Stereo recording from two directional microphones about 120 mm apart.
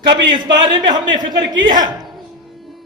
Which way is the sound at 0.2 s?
40° right (ahead or behind).